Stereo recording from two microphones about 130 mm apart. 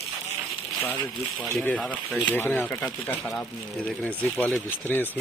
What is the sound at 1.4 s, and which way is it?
Speech, 10° left (ahead or behind).